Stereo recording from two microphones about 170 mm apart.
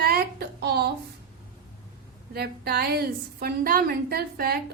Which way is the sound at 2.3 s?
70° right (ahead or behind).